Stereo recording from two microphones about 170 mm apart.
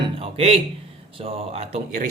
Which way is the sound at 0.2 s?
35° right (ahead or behind).